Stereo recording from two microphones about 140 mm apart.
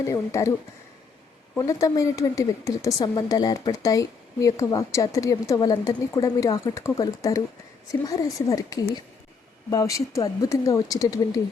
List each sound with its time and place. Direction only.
0.1 s a woman's voice: 20° left (ahead or behind)
1.5 s a woman's voice: 25° left (ahead or behind)